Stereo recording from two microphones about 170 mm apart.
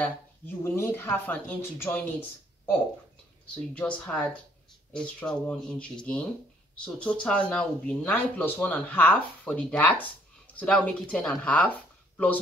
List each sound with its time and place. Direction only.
0.7 s speech: 15° left (ahead or behind)
3.7 s speech: 5° left (ahead or behind)